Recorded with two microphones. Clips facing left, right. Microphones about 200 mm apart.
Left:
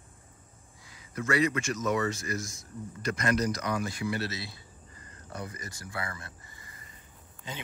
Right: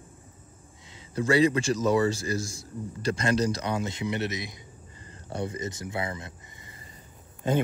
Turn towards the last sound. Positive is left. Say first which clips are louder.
# right 17 dB
turn(degrees=-50)  # may be behind; listen again after turning